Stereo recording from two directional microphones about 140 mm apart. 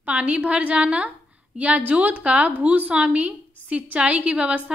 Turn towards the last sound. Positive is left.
turn(degrees=-10)  # may be behind; listen again after turning